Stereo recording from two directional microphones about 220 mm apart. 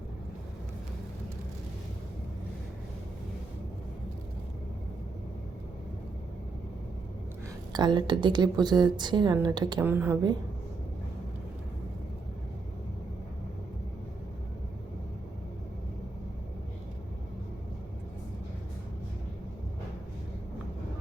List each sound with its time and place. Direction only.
7.7 s a woman's voice: 20° right (ahead or behind)